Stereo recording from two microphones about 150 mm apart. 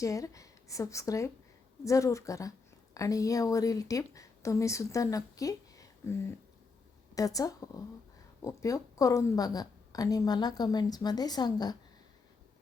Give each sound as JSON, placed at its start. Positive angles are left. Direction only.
{"t": 0.0, "sound": "a woman's voice", "side_deg": 20}
{"t": 7.2, "sound": "a woman's voice", "side_deg": 25}